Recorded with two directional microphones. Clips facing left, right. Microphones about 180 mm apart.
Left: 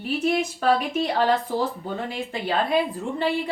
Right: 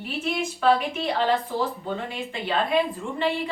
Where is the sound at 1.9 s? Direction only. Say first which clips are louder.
Left 1 dB; 40° left (ahead or behind).